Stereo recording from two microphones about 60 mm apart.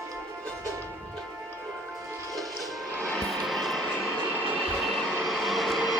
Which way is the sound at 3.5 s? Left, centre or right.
Centre.